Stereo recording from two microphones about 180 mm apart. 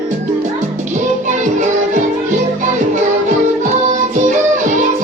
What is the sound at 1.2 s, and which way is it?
Music, 45° right (ahead or behind).